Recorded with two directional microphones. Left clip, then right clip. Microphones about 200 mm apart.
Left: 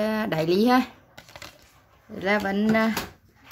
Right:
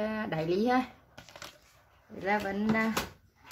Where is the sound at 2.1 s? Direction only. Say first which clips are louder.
Left 6 dB; 55° left (ahead or behind).